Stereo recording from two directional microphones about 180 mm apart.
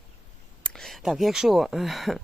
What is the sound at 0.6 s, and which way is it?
Speech, centre (ahead or behind).